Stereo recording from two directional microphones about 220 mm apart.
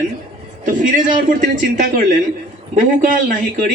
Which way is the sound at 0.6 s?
35° right (ahead or behind).